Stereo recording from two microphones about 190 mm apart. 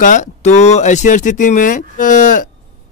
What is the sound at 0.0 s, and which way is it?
Speech, 40° left (ahead or behind).